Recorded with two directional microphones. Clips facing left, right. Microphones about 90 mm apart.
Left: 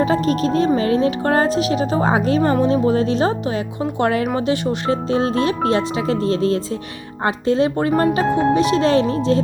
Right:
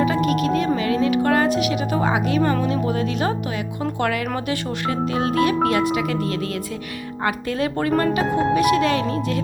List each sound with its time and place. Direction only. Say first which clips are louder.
0.0 s a woman's voice: left 2 dB; 30° left (ahead or behind)